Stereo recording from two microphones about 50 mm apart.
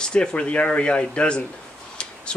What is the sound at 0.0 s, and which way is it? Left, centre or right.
Speech, centre.